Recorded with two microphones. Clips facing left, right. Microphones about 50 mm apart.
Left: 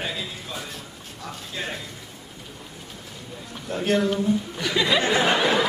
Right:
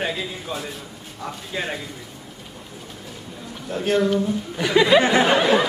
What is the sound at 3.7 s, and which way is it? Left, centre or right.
Speech, centre.